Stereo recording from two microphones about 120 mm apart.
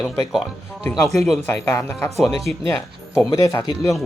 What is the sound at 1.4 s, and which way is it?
Speech, 20° left (ahead or behind).